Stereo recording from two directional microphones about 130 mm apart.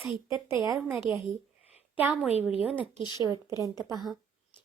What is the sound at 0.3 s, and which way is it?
Speech, 30° right (ahead or behind).